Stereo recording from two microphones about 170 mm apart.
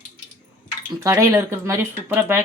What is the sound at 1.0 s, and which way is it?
Speech, 15° right (ahead or behind).